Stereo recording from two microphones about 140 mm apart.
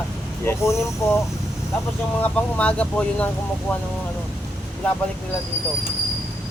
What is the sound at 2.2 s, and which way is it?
Speech, 10° left (ahead or behind).